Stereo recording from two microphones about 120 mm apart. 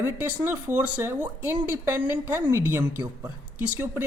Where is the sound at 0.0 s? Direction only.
15° right (ahead or behind).